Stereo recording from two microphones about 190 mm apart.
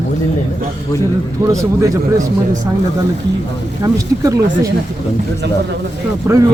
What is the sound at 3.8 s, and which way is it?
Speech, 15° right (ahead or behind).